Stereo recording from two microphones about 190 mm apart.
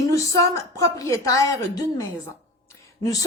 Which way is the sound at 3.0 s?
20° left (ahead or behind).